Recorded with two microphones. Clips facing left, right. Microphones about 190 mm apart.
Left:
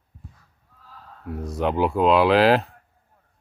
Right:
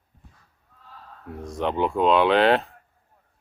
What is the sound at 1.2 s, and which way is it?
Speech, 5° left (ahead or behind).